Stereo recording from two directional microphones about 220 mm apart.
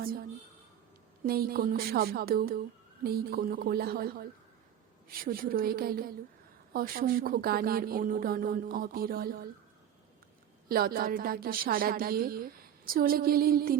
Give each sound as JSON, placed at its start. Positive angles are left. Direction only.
{"t": 1.3, "sound": "speech", "side_deg": -45}
{"t": 10.7, "sound": "speech", "side_deg": -40}